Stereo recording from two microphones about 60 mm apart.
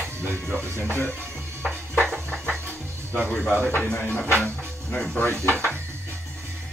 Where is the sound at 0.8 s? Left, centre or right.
Left.